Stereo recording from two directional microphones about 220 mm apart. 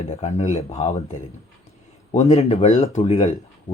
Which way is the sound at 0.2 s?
30° left (ahead or behind).